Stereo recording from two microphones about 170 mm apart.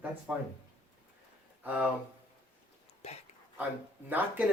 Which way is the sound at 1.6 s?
10° right (ahead or behind).